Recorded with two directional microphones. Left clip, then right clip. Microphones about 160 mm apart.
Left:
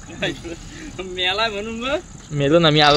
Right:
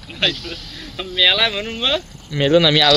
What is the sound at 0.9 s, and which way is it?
Speech, 65° left (ahead or behind).